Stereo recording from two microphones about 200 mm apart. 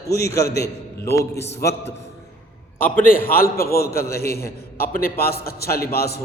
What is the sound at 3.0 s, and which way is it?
A man's voice, 45° left (ahead or behind).